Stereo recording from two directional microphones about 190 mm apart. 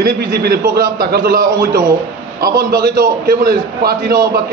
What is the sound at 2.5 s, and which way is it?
A man's voice, 50° right (ahead or behind).